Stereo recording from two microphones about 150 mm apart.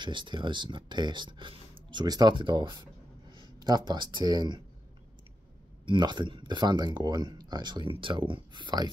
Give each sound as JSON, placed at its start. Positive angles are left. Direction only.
{"t": 0.0, "sound": "speech", "side_deg": -30}
{"t": 5.9, "sound": "speech", "side_deg": -30}